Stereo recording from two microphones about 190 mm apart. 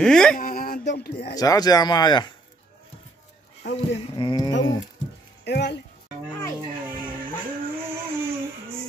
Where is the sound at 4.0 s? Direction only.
25° left (ahead or behind).